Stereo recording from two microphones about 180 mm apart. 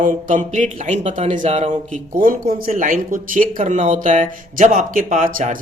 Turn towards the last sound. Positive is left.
turn(degrees=-50)  # may be behind; listen again after turning